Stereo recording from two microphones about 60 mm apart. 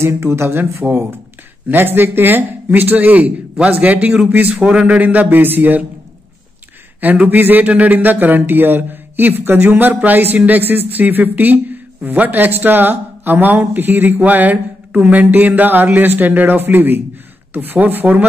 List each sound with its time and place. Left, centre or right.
0.0 s speech: right
1.7 s a man's voice: right
7.0 s a man's voice: right